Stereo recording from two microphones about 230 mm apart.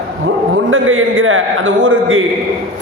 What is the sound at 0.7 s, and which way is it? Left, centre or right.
A man's voice, right.